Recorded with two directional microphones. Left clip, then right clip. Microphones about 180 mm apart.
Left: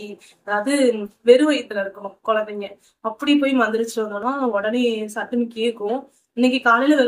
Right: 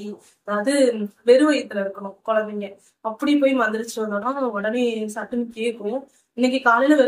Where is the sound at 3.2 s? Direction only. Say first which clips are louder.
Even; 20° left (ahead or behind).